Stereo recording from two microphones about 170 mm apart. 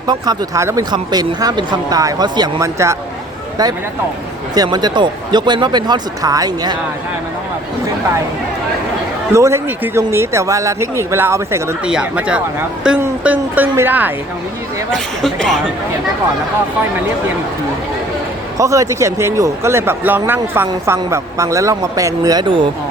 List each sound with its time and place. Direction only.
0.1 s speech: 20° right (ahead or behind)
9.3 s speech: 15° right (ahead or behind)
11.9 s speech: 5° right (ahead or behind)
14.9 s speech: centre (ahead or behind)
18.5 s speech: 20° right (ahead or behind)